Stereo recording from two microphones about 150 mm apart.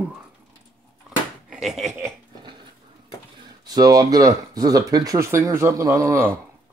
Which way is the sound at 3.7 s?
25° right (ahead or behind).